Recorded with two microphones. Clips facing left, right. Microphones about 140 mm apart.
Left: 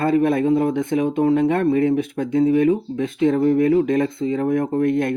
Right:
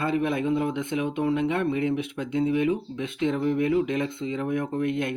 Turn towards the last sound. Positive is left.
turn(degrees=45)  # may be behind; listen again after turning